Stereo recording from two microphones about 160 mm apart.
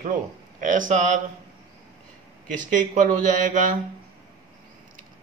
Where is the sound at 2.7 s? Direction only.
55° right (ahead or behind).